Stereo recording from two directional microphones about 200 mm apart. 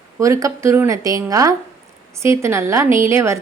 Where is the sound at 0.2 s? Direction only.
15° right (ahead or behind).